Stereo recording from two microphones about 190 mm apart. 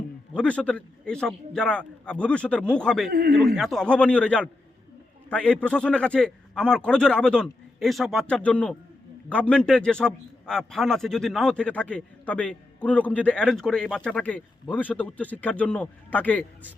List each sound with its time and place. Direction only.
0.3 s a man's voice: 5° left (ahead or behind)
3.1 s a man's voice: 50° right (ahead or behind)
3.3 s a man's voice: centre (ahead or behind)